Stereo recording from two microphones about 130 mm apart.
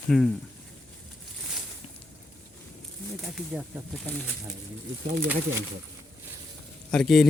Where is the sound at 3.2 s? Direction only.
5° right (ahead or behind).